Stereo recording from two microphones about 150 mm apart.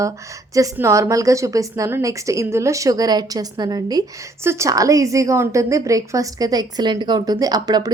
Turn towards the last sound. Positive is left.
turn(degrees=-25)  # may be behind; listen again after turning